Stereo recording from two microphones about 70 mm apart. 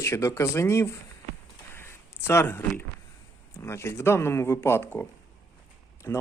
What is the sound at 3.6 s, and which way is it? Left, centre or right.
Speech, left.